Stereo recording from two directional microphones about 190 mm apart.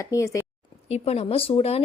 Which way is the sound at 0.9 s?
30° left (ahead or behind).